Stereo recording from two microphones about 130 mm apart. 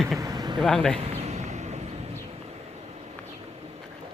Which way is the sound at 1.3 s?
60° right (ahead or behind).